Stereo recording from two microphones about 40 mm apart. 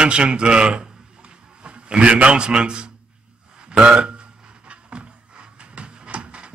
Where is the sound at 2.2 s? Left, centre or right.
Right.